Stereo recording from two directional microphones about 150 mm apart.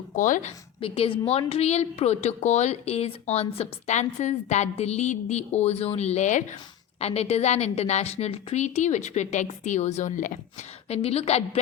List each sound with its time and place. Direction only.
0.2 s a woman's voice: 60° left (ahead or behind)
0.8 s a woman's voice: 40° left (ahead or behind); by 6.6 s 55° left (ahead or behind)
7.0 s a woman's voice: 45° left (ahead or behind)
10.8 s a woman's voice: 45° left (ahead or behind)